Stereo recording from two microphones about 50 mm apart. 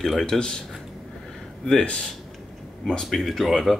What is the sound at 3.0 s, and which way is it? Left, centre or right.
Speech, centre.